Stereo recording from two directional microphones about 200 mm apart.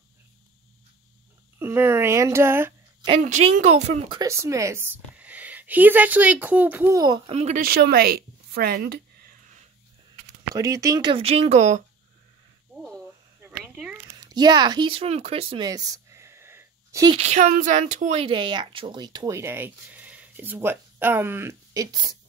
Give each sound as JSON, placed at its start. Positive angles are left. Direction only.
{"t": 1.6, "sound": "speech", "side_deg": -10}
{"t": 3.1, "sound": "a woman's voice", "side_deg": -35}
{"t": 4.2, "sound": "a woman's voice", "side_deg": -15}
{"t": 10.5, "sound": "a woman's voice", "side_deg": -15}
{"t": 12.7, "sound": "a sound", "side_deg": 0}
{"t": 14.1, "sound": "speech", "side_deg": -20}
{"t": 17.2, "sound": "a woman's voice", "side_deg": -35}